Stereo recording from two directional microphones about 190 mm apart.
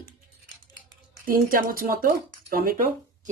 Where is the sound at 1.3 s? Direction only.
50° right (ahead or behind).